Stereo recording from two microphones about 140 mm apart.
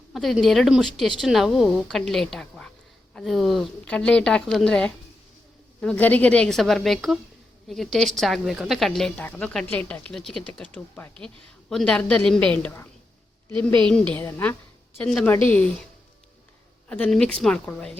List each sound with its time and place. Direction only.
0.1 s a woman's voice: centre (ahead or behind); by 14.5 s 20° left (ahead or behind)
15.0 s speech: 10° left (ahead or behind)
16.9 s speech: 5° left (ahead or behind)